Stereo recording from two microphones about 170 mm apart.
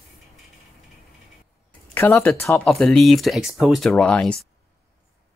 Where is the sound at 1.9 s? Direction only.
10° left (ahead or behind).